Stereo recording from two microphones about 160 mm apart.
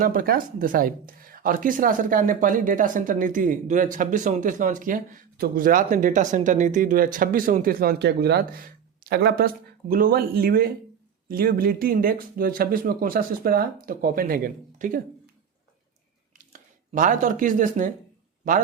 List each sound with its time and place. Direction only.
0.0 s speech: 60° right (ahead or behind); by 9.5 s 80° right
9.9 s speech: 65° right (ahead or behind)
16.4 s speech: 55° right (ahead or behind)